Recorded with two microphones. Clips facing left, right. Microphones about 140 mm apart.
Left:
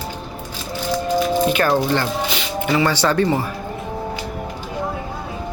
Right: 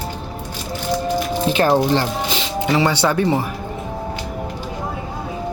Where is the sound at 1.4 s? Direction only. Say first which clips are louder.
Right 1 dB; 30° right (ahead or behind).